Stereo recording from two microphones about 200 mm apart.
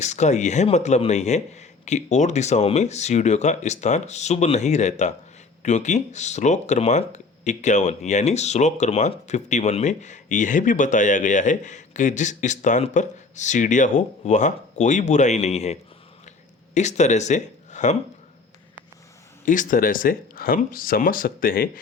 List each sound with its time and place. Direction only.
0.0 s speech: 35° left (ahead or behind)
19.5 s speech: 40° left (ahead or behind)